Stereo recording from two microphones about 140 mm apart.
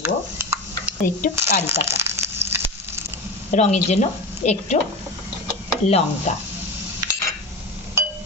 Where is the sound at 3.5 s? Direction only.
55° left (ahead or behind).